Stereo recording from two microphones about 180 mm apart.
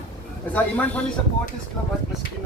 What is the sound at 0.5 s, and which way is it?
Speech, 5° left (ahead or behind).